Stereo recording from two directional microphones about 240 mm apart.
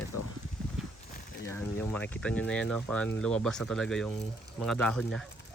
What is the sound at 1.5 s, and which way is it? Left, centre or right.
Speech, centre.